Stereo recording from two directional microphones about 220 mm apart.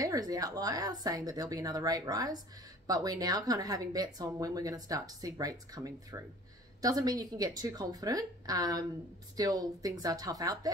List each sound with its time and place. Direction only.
0.0 s speech: 15° right (ahead or behind)